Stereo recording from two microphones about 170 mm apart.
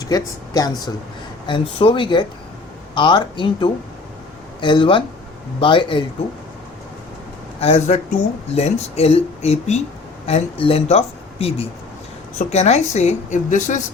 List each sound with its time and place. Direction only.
0.0 s speech: 20° left (ahead or behind)
7.6 s a woman's voice: 40° left (ahead or behind)